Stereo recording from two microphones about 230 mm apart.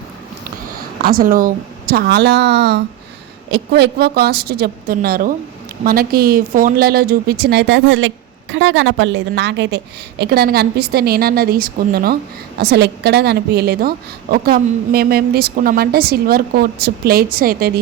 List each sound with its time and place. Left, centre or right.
1.0 s a woman's voice: right